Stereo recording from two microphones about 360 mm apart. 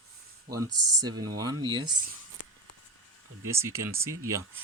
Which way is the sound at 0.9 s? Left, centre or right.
Centre.